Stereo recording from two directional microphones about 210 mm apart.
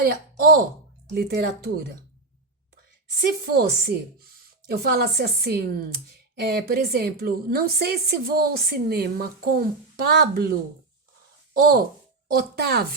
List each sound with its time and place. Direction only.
0.0 s a woman's voice: 45° right (ahead or behind)
3.4 s a woman's voice: 45° right (ahead or behind)
11.5 s a woman's voice: 45° right (ahead or behind)